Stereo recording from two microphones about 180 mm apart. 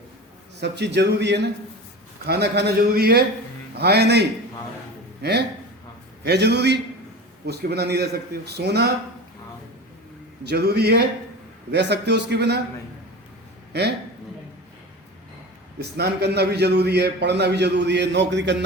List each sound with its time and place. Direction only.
0.6 s a man's voice: 70° right (ahead or behind)
10.4 s a man's voice: 65° right (ahead or behind)
15.8 s a man's voice: 65° right (ahead or behind)